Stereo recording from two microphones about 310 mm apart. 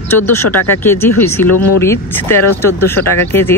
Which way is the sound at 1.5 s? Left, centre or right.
Left.